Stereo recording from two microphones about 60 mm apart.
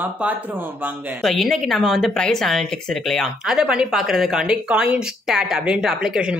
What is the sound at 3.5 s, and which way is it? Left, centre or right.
A woman's voice, centre.